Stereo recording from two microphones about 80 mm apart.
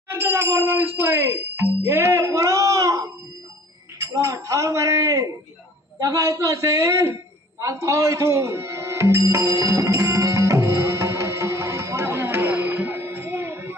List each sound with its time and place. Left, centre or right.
0.1 s speech: right
4.0 s speech: right
7.6 s music: right